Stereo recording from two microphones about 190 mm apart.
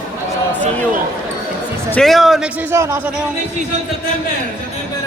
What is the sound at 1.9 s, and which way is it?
A man's voice, centre (ahead or behind).